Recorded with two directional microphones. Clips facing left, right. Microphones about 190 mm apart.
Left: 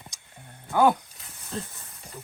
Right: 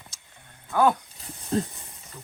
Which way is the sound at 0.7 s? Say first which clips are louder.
Left 1 dB; 15° left (ahead or behind).